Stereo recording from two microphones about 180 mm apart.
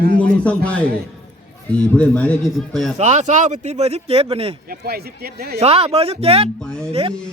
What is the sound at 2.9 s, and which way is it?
Speech, 40° right (ahead or behind).